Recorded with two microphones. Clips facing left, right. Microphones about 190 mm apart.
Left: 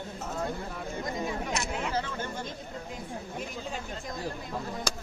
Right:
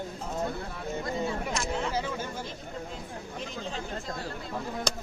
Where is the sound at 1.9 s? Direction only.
10° right (ahead or behind).